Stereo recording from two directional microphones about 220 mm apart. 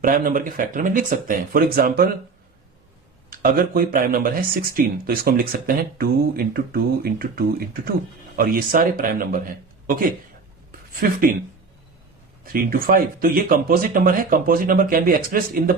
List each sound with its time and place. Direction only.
0.0 s speech: 40° right (ahead or behind)
3.2 s speech: 40° right (ahead or behind)
10.7 s a sound: 40° right (ahead or behind)
12.5 s speech: 40° right (ahead or behind)